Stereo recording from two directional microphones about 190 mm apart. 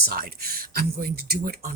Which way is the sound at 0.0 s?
50° right (ahead or behind).